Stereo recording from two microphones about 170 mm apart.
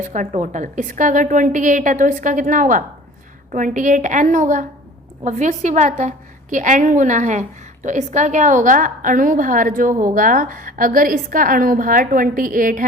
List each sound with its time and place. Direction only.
0.0 s a woman's voice: 45° right (ahead or behind)